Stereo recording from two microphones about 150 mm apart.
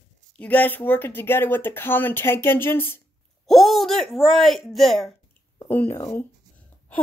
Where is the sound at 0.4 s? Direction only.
10° left (ahead or behind).